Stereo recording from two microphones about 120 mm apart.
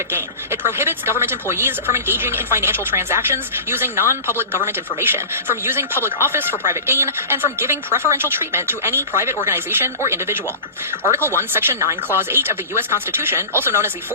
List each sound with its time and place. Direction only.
0.1 s speech: 20° right (ahead or behind)